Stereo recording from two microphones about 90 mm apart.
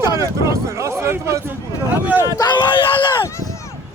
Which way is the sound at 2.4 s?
55° left (ahead or behind).